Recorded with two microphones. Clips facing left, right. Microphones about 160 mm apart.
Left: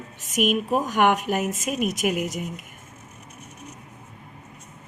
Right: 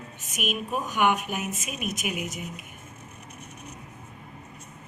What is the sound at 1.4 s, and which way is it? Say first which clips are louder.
Speech: left 7 dB; 90° left.